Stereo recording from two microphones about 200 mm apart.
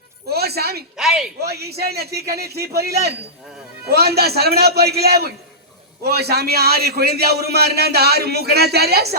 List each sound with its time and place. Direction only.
0.3 s a sound: 50° right (ahead or behind)
0.9 s speech: 5° right (ahead or behind)
1.4 s a man's voice: 50° right (ahead or behind)